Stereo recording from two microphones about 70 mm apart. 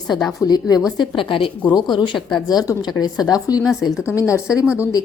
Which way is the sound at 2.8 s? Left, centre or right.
Left.